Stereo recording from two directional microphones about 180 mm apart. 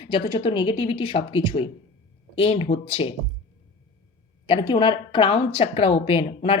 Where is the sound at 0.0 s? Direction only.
30° left (ahead or behind).